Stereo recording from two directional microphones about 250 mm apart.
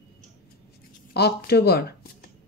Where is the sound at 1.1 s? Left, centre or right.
Left.